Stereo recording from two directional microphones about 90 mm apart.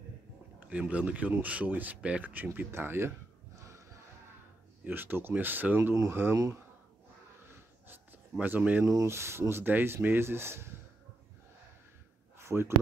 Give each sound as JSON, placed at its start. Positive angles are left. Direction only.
{"t": 0.6, "sound": "speech", "side_deg": -15}
{"t": 4.8, "sound": "speech", "side_deg": -20}
{"t": 7.9, "sound": "a sound", "side_deg": -20}
{"t": 8.9, "sound": "speech", "side_deg": -30}
{"t": 12.4, "sound": "speech", "side_deg": -30}